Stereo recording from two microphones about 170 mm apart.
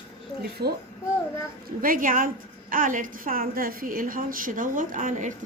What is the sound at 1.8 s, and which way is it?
A woman's voice, 55° right (ahead or behind).